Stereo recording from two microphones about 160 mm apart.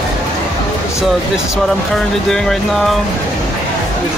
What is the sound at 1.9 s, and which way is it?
Speech, 5° left (ahead or behind).